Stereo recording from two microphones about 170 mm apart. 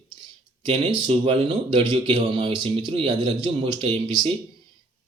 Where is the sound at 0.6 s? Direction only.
35° right (ahead or behind).